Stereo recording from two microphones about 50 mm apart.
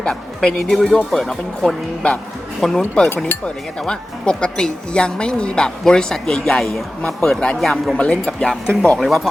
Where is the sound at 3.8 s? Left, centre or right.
Centre.